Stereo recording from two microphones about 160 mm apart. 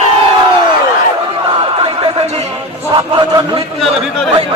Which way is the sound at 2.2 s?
45° right (ahead or behind).